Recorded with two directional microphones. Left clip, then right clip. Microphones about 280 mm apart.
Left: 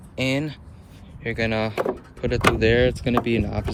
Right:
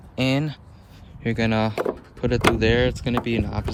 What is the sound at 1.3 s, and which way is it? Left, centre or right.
Speech, centre.